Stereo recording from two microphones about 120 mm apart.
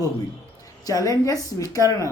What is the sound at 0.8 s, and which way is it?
Speech, 30° left (ahead or behind).